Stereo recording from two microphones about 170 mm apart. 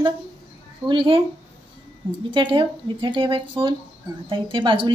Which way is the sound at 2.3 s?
30° right (ahead or behind).